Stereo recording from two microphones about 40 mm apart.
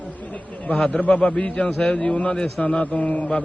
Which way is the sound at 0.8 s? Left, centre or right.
Left.